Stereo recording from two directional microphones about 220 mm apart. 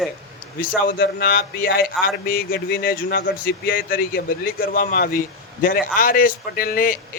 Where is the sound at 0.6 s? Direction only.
40° left (ahead or behind).